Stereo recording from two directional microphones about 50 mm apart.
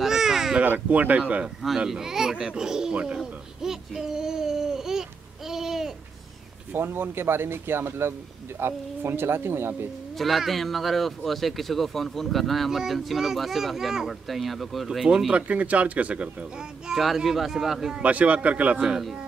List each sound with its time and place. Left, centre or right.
0.0 s a sound: centre
0.8 s speech: right
1.9 s speech: centre
5.5 s a sound: centre
6.7 s speech: right
10.1 s speech: centre
15.3 s speech: right
17.0 s speech: centre
18.0 s speech: right